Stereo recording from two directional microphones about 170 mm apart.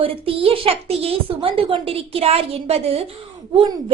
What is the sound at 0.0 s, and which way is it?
A child's voice, 35° right (ahead or behind).